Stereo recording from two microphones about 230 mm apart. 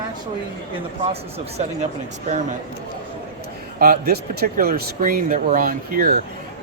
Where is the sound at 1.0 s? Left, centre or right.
Right.